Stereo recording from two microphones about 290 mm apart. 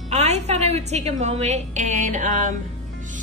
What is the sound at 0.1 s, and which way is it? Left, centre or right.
A woman's voice, right.